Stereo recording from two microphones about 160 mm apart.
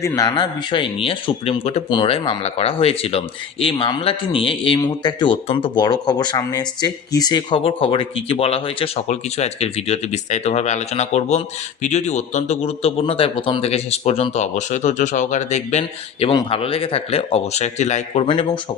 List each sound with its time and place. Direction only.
0.0 s speech: 20° left (ahead or behind); by 15.8 s 45° left (ahead or behind)
16.3 s speech: 30° left (ahead or behind)